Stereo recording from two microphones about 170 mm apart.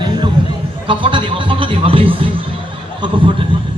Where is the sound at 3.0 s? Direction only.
30° right (ahead or behind).